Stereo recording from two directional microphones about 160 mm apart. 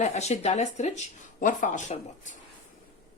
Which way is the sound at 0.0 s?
45° left (ahead or behind).